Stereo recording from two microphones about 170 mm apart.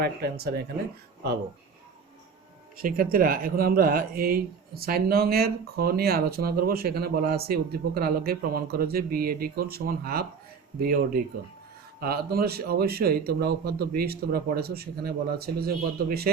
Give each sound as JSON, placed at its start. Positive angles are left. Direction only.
{"t": 0.0, "sound": "speech", "side_deg": -65}
{"t": 2.8, "sound": "speech", "side_deg": -60}